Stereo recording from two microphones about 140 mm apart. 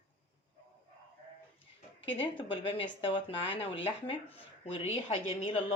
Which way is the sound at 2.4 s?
40° left (ahead or behind).